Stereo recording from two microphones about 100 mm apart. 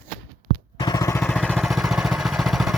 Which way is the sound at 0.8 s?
45° left (ahead or behind).